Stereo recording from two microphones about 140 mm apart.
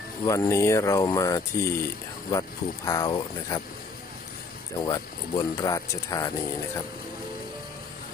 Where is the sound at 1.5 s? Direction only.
90° left.